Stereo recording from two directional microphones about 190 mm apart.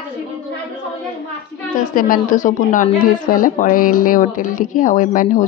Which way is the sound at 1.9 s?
45° left (ahead or behind).